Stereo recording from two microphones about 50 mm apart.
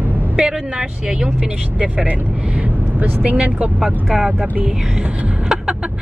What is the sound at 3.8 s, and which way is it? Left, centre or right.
Speech, centre.